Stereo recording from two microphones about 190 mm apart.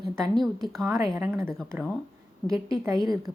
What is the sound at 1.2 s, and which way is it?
A woman's voice, 10° right (ahead or behind).